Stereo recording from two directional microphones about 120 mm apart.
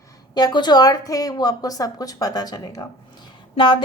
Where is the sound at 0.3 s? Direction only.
35° left (ahead or behind).